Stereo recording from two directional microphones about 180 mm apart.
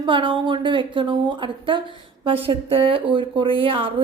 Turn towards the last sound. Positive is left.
turn(degrees=-30)  # may be behind; listen again after turning